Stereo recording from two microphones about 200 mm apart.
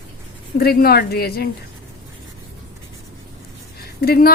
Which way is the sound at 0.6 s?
50° left (ahead or behind).